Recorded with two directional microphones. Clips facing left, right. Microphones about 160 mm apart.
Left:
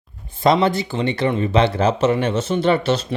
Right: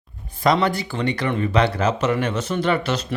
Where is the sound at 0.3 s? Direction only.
25° left (ahead or behind).